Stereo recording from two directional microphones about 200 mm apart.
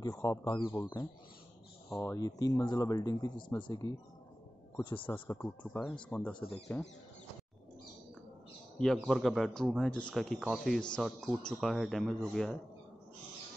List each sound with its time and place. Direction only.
0.0 s speech: 15° left (ahead or behind)
5.2 s speech: 15° left (ahead or behind)
8.7 s speech: centre (ahead or behind)